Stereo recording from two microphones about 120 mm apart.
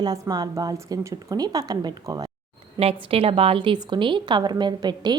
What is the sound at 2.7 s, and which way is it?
A woman's voice, 55° right (ahead or behind).